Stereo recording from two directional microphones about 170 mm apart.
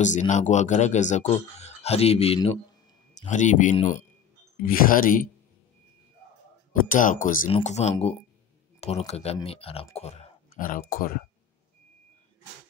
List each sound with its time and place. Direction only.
0.0 s speech: 45° left (ahead or behind)
6.7 s speech: 50° left (ahead or behind)
7.5 s speech: 40° left (ahead or behind)
9.9 s a sound: 40° left (ahead or behind)
10.6 s speech: 55° left (ahead or behind)